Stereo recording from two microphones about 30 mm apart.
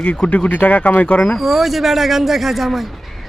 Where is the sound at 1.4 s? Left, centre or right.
Centre.